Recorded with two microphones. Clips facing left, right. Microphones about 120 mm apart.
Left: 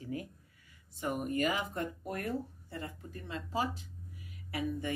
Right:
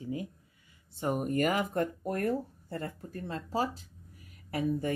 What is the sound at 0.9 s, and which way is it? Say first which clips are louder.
Speech: right 4 dB; 35° right (ahead or behind).